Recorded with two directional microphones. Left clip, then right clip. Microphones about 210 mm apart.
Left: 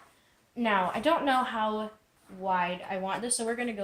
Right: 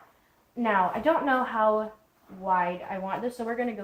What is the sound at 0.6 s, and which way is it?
Speech, 40° left (ahead or behind).